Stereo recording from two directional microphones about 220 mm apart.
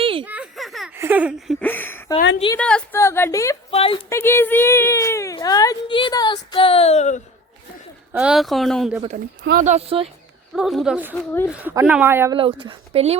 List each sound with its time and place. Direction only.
0.0 s a sound: 25° right (ahead or behind)
0.3 s a sound: 5° right (ahead or behind)
0.9 s speech: 10° right (ahead or behind)
1.6 s speech: 10° left (ahead or behind)
3.7 s speech: 25° left (ahead or behind)
4.1 s speech: 10° left (ahead or behind); by 7.2 s 30° left (ahead or behind)
8.1 s speech: 5° right (ahead or behind)
9.0 s speech: 40° right (ahead or behind)
10.5 s speech: centre (ahead or behind)
12.4 s speech: 20° right (ahead or behind)